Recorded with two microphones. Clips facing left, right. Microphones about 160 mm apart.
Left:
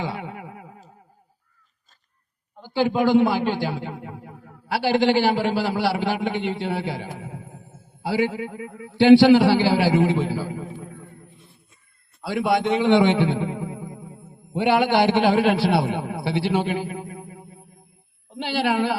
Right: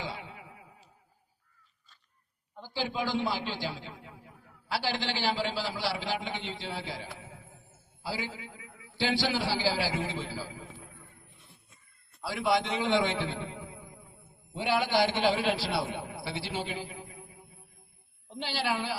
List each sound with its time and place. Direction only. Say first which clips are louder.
0.0 s chuckle: left 10 dB; 60° left (ahead or behind)
2.6 s a man's voice: left 13 dB; 60° left (ahead or behind)
12.2 s a man's voice: left 7 dB; 60° left (ahead or behind)